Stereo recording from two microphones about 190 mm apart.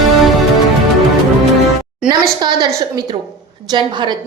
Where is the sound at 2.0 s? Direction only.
20° right (ahead or behind).